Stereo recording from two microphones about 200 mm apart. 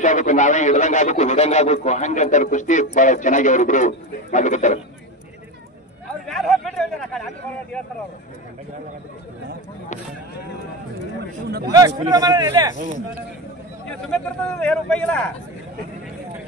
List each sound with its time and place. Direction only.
0.0 s a man's voice: 40° left (ahead or behind)
6.2 s speech: centre (ahead or behind)
11.6 s a man's voice: 15° right (ahead or behind)
14.0 s speech: 5° left (ahead or behind)